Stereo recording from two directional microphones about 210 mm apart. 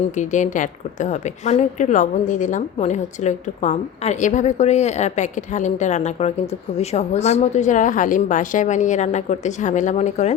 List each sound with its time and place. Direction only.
0.2 s a woman's voice: 35° left (ahead or behind)